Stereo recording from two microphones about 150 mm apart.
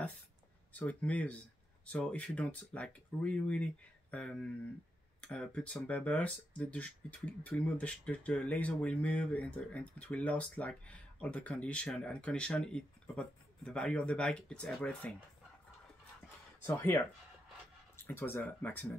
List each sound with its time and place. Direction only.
0.7 s speech: 10° left (ahead or behind)
16.6 s speech: 15° left (ahead or behind)